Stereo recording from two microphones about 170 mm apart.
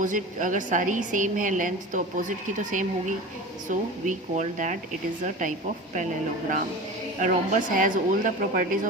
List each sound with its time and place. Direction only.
0.0 s a woman's voice: 50° right (ahead or behind)
7.2 s a woman's voice: 50° right (ahead or behind)